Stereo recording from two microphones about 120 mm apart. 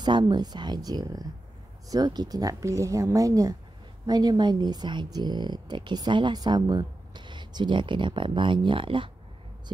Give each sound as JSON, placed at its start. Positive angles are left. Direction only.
{"t": 0.0, "sound": "speech", "side_deg": -35}